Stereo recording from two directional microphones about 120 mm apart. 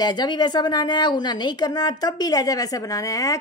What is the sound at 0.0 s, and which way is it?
Speech, 35° left (ahead or behind).